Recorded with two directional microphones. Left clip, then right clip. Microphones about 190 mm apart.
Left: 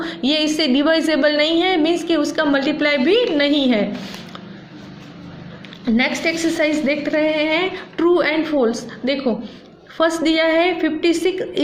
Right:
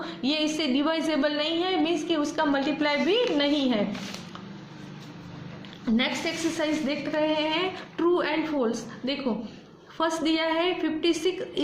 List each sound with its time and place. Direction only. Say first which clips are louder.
0.0 s a woman's voice: left 8 dB; 30° left (ahead or behind)
6.0 s a woman's voice: left 9 dB; 30° left (ahead or behind)